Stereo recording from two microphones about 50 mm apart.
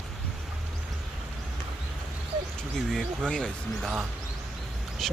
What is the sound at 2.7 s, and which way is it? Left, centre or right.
Speech, centre.